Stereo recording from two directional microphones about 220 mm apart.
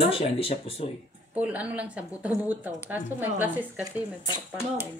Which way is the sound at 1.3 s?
5° right (ahead or behind).